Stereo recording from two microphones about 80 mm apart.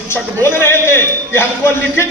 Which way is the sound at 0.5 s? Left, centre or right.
Left.